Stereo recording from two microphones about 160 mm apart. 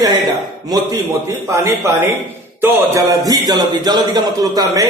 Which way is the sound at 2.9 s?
20° right (ahead or behind).